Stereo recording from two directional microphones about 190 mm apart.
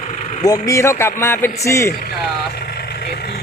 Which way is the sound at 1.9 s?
50° left (ahead or behind).